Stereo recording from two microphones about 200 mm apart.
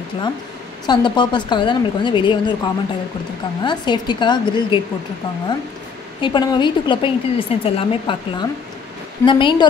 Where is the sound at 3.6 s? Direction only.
20° left (ahead or behind).